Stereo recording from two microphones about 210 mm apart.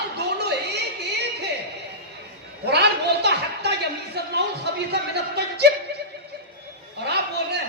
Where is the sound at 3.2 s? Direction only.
50° right (ahead or behind).